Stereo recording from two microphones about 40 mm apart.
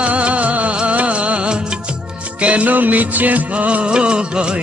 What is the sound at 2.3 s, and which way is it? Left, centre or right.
Music, right.